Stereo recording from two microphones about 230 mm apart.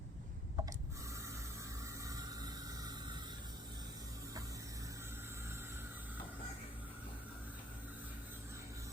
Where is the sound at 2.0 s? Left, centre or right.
Centre.